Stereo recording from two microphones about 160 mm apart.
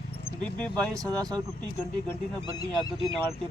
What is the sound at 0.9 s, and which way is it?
Speech, 25° right (ahead or behind).